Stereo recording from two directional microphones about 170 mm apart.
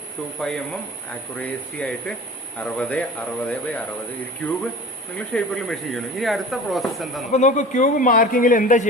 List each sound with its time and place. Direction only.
0.3 s speech: 5° left (ahead or behind)
5.3 s speech: 5° left (ahead or behind)
7.3 s speech: 45° left (ahead or behind)